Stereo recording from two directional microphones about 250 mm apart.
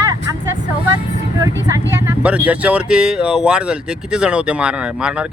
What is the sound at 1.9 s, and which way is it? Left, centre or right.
Speech, centre.